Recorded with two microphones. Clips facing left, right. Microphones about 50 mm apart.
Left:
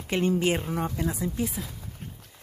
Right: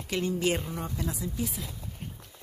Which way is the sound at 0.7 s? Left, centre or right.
Left.